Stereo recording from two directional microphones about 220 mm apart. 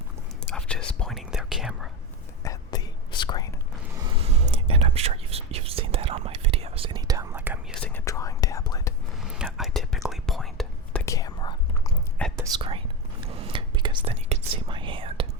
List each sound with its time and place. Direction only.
0.5 s whispering: 5° left (ahead or behind)
2.4 s whispering: 15° left (ahead or behind)
3.9 s whispering: 20° right (ahead or behind)
7.3 s whispering: 10° right (ahead or behind)
7.8 s whispering: 5° left (ahead or behind)
9.2 s whispering: 5° right (ahead or behind)
11.0 s whispering: 15° left (ahead or behind)
12.4 s whispering: 20° right (ahead or behind)